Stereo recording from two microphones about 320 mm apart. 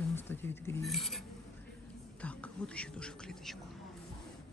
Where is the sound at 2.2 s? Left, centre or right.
Centre.